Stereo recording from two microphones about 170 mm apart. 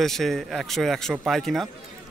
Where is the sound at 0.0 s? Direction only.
Centre (ahead or behind).